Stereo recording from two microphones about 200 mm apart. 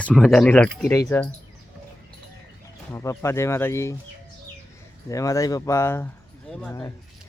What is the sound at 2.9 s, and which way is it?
Speech, 15° left (ahead or behind).